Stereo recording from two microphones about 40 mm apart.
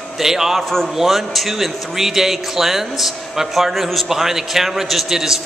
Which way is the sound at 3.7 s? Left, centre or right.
Centre.